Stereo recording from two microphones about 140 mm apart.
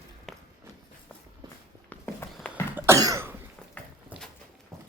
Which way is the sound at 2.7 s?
20° right (ahead or behind).